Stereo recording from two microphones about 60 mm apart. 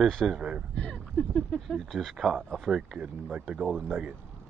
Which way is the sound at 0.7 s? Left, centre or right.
Centre.